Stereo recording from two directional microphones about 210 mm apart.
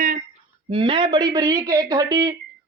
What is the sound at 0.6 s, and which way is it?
A man's voice, 25° right (ahead or behind).